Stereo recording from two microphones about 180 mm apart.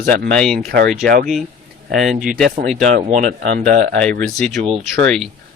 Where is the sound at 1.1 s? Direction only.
50° right (ahead or behind).